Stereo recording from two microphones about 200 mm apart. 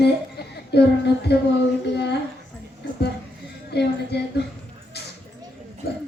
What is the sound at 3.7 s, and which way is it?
Speech, 55° left (ahead or behind).